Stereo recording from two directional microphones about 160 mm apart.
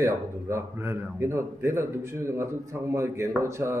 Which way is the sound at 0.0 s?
15° right (ahead or behind).